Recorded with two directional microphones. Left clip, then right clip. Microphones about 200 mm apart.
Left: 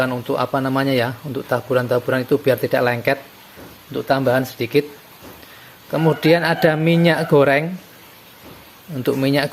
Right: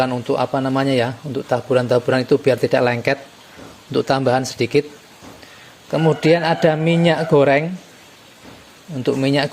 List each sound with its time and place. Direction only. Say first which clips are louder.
0.0 s a man's voice: right 1 dB; 10° right (ahead or behind)
3.9 s speech: right 1 dB; 25° right (ahead or behind)
5.9 s speech: even; 5° right (ahead or behind)
9.0 s speech: even; centre (ahead or behind)